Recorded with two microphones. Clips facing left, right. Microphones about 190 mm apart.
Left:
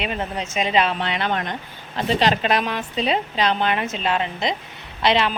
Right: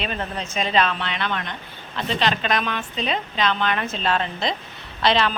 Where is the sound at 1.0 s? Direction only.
40° left (ahead or behind).